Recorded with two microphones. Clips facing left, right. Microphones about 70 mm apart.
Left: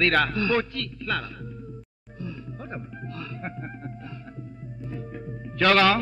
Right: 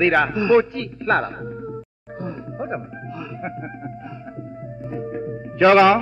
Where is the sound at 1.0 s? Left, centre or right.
Right.